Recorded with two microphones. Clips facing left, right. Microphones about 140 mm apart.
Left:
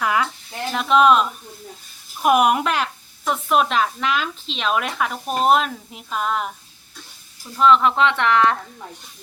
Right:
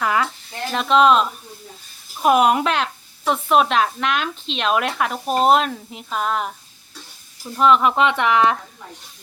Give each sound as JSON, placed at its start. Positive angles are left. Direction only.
{"t": 0.0, "sound": "a sound", "side_deg": 5}
{"t": 0.7, "sound": "speech", "side_deg": 5}
{"t": 5.1, "sound": "speech", "side_deg": -25}
{"t": 5.5, "sound": "speech", "side_deg": 0}
{"t": 7.5, "sound": "speech", "side_deg": -10}